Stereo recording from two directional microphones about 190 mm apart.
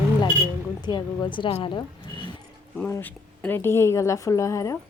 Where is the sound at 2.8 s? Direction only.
10° left (ahead or behind).